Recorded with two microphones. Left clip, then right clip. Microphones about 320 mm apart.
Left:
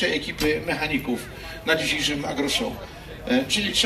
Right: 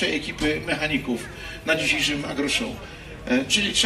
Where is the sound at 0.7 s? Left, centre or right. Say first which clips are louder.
Even; centre.